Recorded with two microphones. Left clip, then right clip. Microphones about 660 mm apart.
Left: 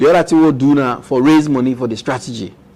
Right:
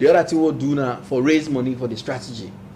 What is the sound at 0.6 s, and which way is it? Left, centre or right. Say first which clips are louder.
Speech: left 8 dB; left.